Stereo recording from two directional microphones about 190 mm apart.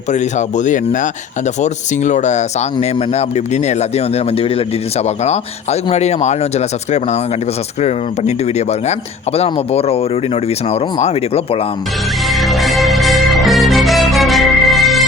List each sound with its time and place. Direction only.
0.1 s speech: 40° left (ahead or behind)
12.3 s music: centre (ahead or behind)